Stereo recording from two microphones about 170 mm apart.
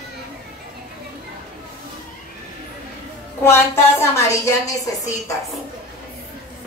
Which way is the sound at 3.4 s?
15° left (ahead or behind).